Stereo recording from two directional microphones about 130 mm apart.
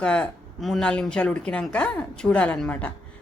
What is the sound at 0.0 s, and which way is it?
A woman's voice, 10° left (ahead or behind).